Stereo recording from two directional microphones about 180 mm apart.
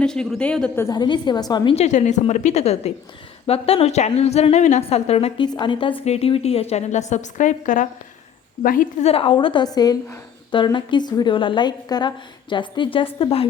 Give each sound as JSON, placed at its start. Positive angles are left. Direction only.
{"t": 0.0, "sound": "speech", "side_deg": 5}
{"t": 0.9, "sound": "a woman's voice", "side_deg": 25}
{"t": 1.7, "sound": "a woman's voice", "side_deg": 40}
{"t": 9.0, "sound": "a woman's voice", "side_deg": 30}